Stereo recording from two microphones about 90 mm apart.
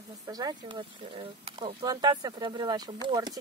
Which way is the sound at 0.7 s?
70° right (ahead or behind).